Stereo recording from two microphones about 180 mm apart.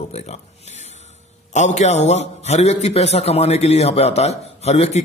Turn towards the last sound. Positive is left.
turn(degrees=35)  # may be behind; listen again after turning